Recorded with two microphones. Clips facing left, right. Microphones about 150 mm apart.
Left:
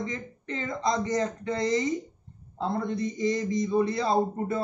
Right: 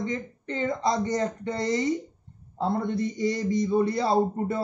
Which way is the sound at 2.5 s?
30° right (ahead or behind).